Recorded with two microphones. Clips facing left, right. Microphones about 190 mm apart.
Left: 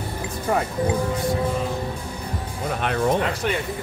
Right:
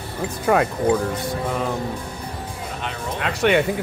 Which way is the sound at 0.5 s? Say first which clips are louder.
Right 5 dB; 90° right.